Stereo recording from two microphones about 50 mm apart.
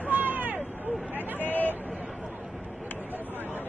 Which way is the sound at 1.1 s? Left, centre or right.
Left.